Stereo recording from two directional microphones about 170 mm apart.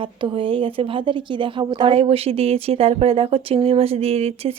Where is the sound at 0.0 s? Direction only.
30° right (ahead or behind).